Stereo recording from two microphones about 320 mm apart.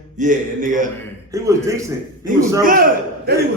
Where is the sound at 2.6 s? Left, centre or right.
Right.